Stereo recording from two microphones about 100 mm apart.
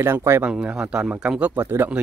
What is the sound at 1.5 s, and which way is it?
Speech, 25° right (ahead or behind).